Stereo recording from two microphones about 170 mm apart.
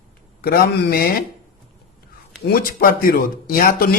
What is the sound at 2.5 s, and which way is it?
Speech, 60° left (ahead or behind).